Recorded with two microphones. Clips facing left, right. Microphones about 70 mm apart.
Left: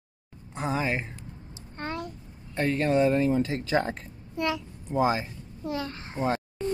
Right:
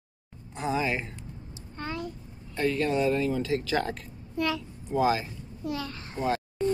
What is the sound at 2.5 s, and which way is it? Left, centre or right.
Speech, left.